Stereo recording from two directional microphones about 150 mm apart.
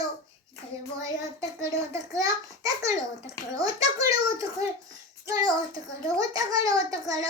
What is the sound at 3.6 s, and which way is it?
A child's voice, 20° right (ahead or behind).